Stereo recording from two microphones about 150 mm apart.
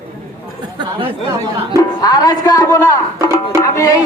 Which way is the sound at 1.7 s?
25° left (ahead or behind).